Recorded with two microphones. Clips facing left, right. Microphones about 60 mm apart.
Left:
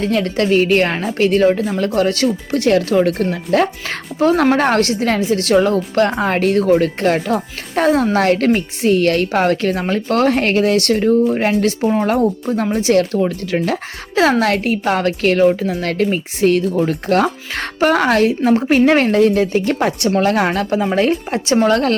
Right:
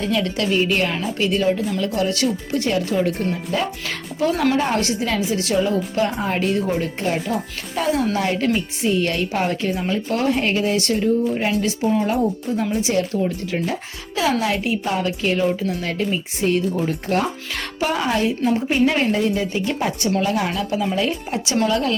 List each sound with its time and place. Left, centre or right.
0.0 s a woman's voice: left
3.8 s speech: left
4.5 s a woman's voice: left
9.9 s a woman's voice: left
14.2 s a woman's voice: left
17.5 s speech: left
17.9 s a woman's voice: left